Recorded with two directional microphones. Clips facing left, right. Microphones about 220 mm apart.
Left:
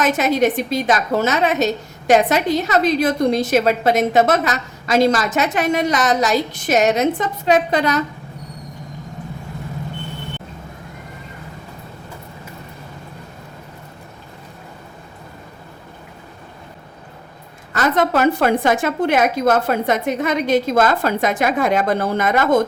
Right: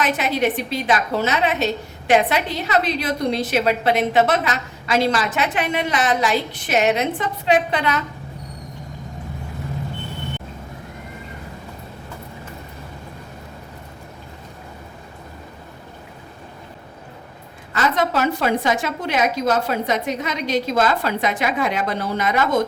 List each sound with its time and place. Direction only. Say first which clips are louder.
0.0 s a woman's voice: left 4 dB; 45° left (ahead or behind)
17.7 s a woman's voice: left 3 dB; 50° left (ahead or behind)